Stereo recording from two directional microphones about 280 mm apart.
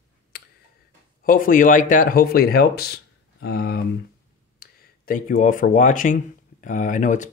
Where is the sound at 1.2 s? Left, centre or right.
Left.